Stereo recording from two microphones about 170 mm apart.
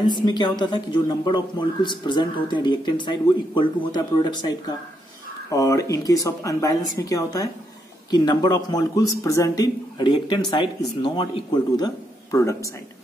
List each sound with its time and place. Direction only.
0.2 s speech: 25° left (ahead or behind)